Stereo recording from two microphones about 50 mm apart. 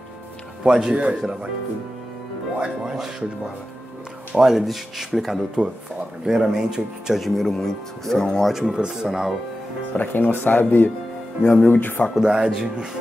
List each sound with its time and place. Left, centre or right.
0.7 s speech: centre
2.6 s speech: centre
4.4 s speech: centre
7.2 s speech: centre
8.6 s speech: centre
9.9 s speech: left
12.2 s speech: centre